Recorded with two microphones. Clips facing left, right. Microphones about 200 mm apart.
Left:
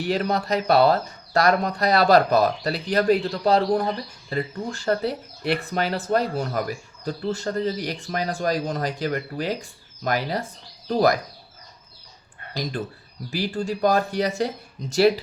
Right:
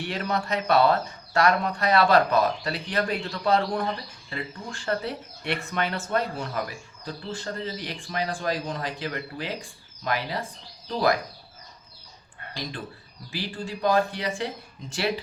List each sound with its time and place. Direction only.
0.0 s speech: 35° left (ahead or behind)
13.3 s speech: 45° left (ahead or behind)